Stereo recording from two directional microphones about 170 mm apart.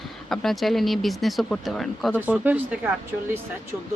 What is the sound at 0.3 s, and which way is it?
Speech, centre (ahead or behind).